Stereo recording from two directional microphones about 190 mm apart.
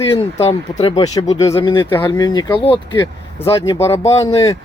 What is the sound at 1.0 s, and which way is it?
Speech, 20° left (ahead or behind).